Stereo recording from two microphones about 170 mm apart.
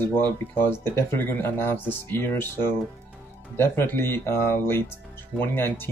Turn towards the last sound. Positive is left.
turn(degrees=10)  # may be behind; listen again after turning